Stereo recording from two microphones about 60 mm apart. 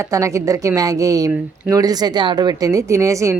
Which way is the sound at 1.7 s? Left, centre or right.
Right.